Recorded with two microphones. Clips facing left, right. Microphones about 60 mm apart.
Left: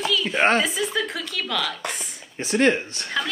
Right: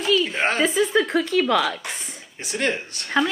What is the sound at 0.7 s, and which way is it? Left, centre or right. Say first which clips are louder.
Speech: right 6 dB; right.